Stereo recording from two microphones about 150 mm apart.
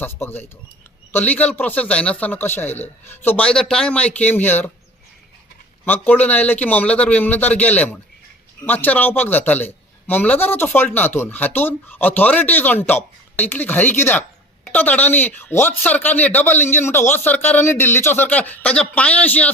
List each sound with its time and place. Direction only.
0.0 s speech: 15° left (ahead or behind)
5.8 s speech: 10° left (ahead or behind)